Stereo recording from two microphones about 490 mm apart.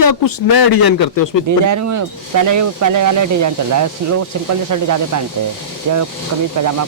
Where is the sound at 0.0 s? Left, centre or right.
Left.